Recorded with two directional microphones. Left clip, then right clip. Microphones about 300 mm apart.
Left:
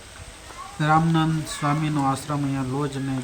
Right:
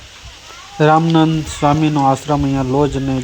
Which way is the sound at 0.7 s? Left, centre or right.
Right.